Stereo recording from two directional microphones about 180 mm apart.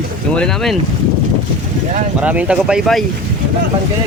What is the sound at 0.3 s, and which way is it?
Speech, centre (ahead or behind).